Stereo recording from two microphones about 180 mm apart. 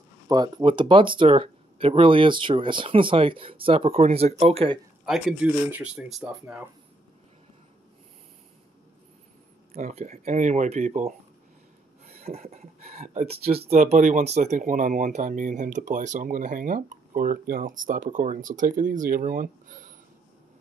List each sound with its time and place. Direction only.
0.3 s speech: 25° right (ahead or behind)
5.0 s speech: 5° right (ahead or behind)
9.8 s speech: 40° right (ahead or behind)
12.2 s speech: 35° right (ahead or behind)